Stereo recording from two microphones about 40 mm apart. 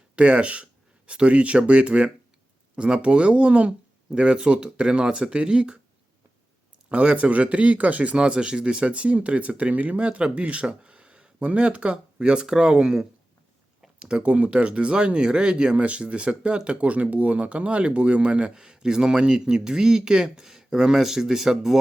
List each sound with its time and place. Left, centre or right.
0.2 s speech: right
6.9 s speech: right
11.4 s speech: right; by 21.8 s centre